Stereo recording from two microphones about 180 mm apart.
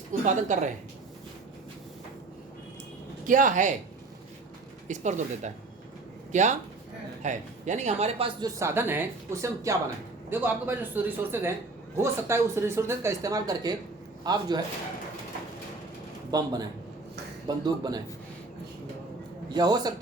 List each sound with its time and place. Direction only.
0.3 s speech: 45° right (ahead or behind)
3.2 s speech: 45° right (ahead or behind)
4.9 s speech: 40° right (ahead or behind)
8.4 s speech: 20° right (ahead or behind)
16.3 s speech: 20° right (ahead or behind)
19.5 s speech: 20° right (ahead or behind)